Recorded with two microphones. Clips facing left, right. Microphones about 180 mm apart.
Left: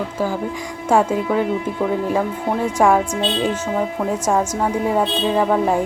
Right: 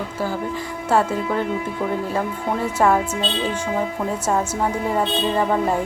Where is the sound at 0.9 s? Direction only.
10° left (ahead or behind).